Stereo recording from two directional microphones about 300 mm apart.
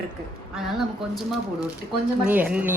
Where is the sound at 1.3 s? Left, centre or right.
Centre.